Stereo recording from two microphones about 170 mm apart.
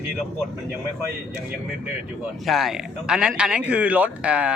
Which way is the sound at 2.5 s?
Centre (ahead or behind).